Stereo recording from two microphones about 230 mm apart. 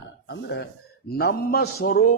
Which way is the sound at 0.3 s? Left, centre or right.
Left.